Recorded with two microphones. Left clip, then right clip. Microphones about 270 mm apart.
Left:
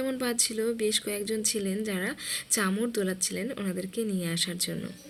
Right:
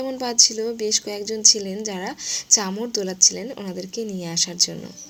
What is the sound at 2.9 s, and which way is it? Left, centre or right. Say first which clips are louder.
Speech: right 10 dB; centre.